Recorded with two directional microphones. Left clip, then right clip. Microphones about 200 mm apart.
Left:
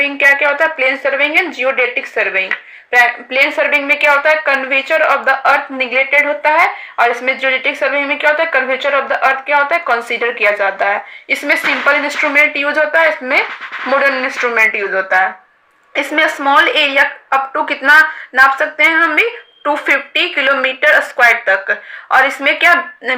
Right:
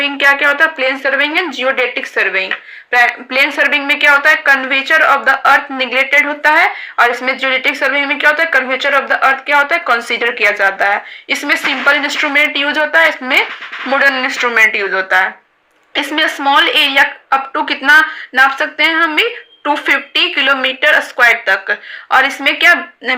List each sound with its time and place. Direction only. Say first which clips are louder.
0.0 s a woman's voice: even; 35° right (ahead or behind)
12.3 s speech: left 1 dB; 40° right (ahead or behind)